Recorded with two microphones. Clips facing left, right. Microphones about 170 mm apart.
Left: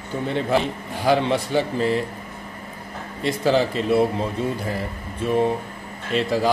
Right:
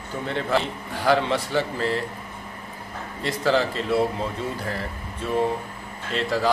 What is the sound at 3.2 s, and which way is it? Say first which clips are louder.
Speech: left 3 dB; 15° left (ahead or behind).